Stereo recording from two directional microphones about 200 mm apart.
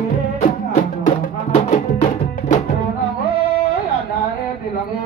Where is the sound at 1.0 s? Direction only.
35° left (ahead or behind).